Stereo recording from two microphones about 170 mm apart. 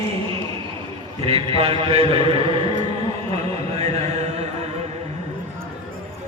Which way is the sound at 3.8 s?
40° right (ahead or behind).